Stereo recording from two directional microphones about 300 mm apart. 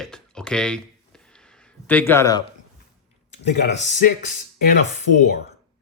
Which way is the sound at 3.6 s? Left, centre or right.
Left.